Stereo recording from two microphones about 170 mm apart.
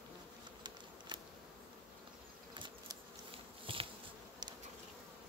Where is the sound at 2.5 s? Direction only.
25° right (ahead or behind).